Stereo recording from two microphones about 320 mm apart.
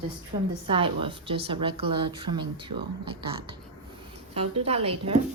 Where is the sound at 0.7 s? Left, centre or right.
Centre.